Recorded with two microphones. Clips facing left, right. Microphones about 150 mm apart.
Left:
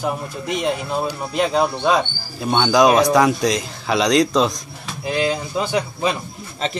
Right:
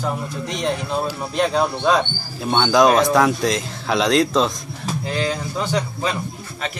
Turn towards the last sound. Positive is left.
turn(degrees=10)  # may be behind; listen again after turning